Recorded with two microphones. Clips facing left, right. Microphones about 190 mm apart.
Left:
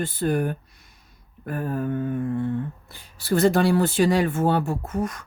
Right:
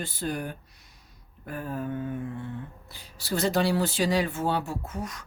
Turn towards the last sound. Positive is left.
turn(degrees=55)  # may be behind; listen again after turning